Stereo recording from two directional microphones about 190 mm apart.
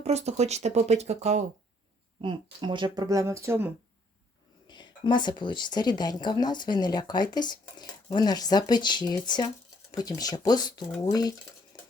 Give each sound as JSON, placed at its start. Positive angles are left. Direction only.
{"t": 0.0, "sound": "speech", "side_deg": -35}
{"t": 2.2, "sound": "speech", "side_deg": -25}
{"t": 4.7, "sound": "speech", "side_deg": 25}
{"t": 11.7, "sound": "cutlery", "side_deg": 20}